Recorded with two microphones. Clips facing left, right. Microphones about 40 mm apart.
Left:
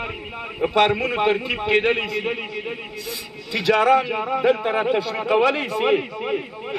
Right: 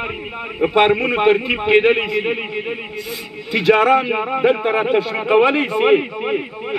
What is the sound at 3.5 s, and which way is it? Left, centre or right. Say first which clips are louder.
Speech: right 3 dB; centre.